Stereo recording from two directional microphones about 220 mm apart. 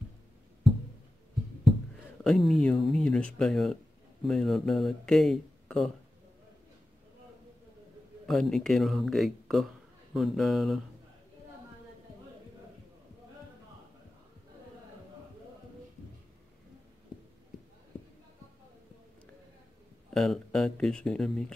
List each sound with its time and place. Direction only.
2.2 s speech: centre (ahead or behind)
8.3 s speech: centre (ahead or behind)
20.1 s speech: centre (ahead or behind)